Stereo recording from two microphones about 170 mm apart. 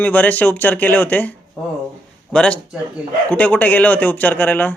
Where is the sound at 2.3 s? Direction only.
5° left (ahead or behind).